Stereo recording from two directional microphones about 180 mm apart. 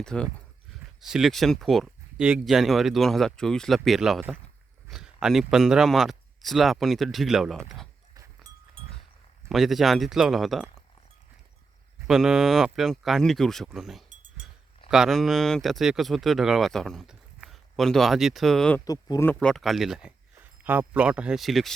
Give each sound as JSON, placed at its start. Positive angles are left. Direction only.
{"t": 0.0, "sound": "speech", "side_deg": 5}
{"t": 9.5, "sound": "speech", "side_deg": 0}
{"t": 12.0, "sound": "speech", "side_deg": 0}
{"t": 14.1, "sound": "a sound", "side_deg": -45}
{"t": 14.8, "sound": "speech", "side_deg": -5}
{"t": 18.9, "sound": "speech", "side_deg": 20}
{"t": 19.3, "sound": "speech", "side_deg": 5}